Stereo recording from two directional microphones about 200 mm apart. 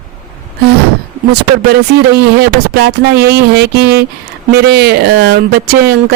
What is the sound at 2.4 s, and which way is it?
Speech, 55° right (ahead or behind).